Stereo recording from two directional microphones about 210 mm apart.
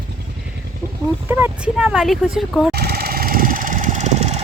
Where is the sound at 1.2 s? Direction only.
10° right (ahead or behind).